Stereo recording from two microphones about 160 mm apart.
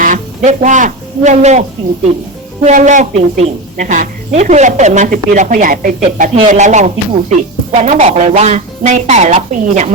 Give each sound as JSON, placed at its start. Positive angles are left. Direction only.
{"t": 0.0, "sound": "speech", "side_deg": -50}
{"t": 2.6, "sound": "speech", "side_deg": -50}